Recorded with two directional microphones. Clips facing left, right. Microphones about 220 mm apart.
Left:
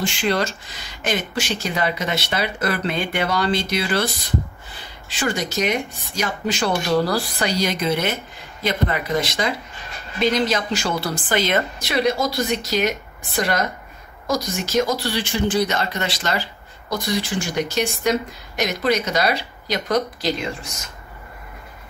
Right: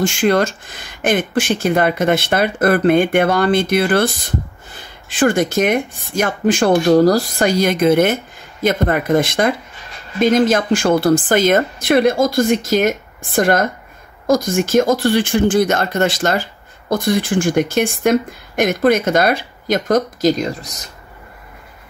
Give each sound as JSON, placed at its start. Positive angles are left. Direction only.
{"t": 0.0, "sound": "speech", "side_deg": -50}